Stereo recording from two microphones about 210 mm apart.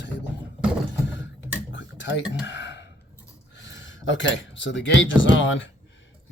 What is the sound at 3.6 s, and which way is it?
Speech, 60° left (ahead or behind).